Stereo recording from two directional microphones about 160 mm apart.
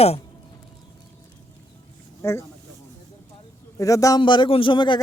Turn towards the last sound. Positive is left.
turn(degrees=30)  # may be behind; listen again after turning